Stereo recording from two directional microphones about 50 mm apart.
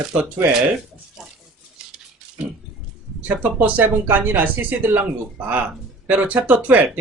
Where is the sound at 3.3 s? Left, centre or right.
Right.